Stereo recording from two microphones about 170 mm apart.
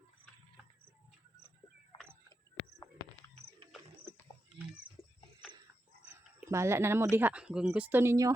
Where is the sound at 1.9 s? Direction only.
30° left (ahead or behind).